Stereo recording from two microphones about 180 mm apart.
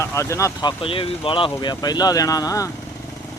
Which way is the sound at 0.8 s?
30° left (ahead or behind).